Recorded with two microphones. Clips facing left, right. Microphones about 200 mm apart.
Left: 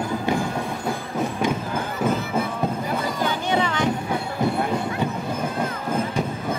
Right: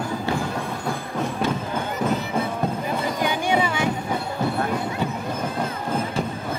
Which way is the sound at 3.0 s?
15° right (ahead or behind).